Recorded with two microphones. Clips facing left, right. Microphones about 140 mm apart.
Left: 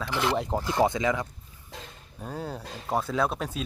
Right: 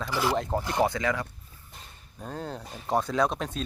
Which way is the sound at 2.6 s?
90° left.